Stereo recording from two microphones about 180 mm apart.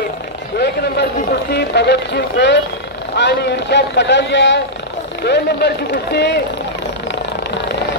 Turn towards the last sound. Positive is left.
turn(degrees=65)  # may be behind; listen again after turning